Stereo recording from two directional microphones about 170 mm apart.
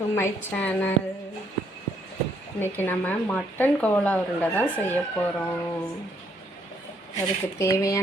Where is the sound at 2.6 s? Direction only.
10° left (ahead or behind).